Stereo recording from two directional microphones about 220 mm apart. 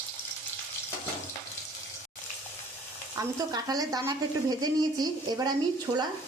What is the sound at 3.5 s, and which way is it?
A woman's voice, 15° right (ahead or behind).